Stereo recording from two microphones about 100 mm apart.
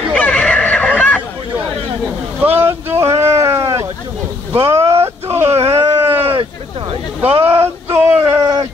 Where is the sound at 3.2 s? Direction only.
30° right (ahead or behind).